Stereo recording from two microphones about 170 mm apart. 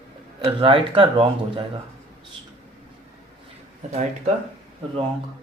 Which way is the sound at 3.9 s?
40° right (ahead or behind).